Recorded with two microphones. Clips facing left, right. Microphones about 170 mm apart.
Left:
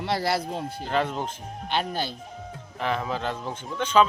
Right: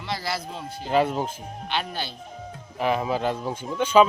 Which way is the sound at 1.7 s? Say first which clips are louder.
Left 2 dB; 45° left (ahead or behind).